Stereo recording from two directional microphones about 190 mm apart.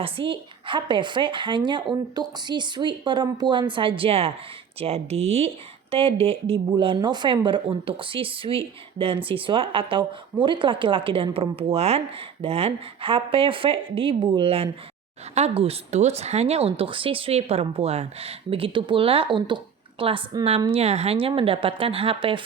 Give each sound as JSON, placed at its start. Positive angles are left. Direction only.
{"t": 0.0, "sound": "speech", "side_deg": -25}